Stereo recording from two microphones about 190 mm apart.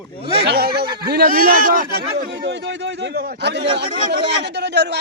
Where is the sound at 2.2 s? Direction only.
60° right (ahead or behind).